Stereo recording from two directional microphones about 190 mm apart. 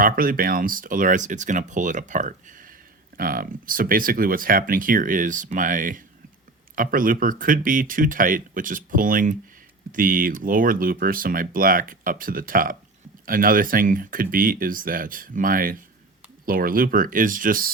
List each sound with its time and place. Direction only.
0.0 s speech: 50° right (ahead or behind)